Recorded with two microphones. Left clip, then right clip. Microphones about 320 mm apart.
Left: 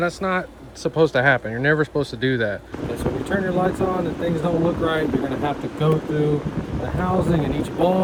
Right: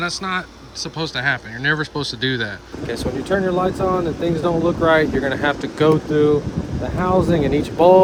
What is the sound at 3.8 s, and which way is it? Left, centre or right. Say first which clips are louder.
Speech: right 3 dB; right.